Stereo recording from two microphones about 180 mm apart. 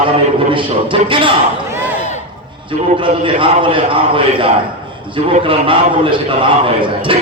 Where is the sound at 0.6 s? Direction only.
30° right (ahead or behind).